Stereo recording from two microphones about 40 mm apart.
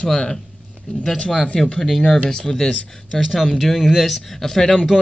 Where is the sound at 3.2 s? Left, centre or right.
Centre.